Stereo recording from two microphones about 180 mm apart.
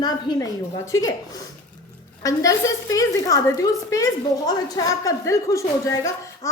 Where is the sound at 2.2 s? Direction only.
20° left (ahead or behind).